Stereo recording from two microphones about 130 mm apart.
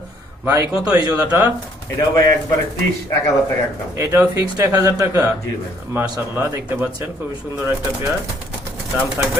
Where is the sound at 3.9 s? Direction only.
20° right (ahead or behind).